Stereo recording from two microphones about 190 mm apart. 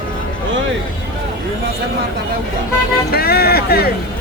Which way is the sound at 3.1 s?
55° left (ahead or behind).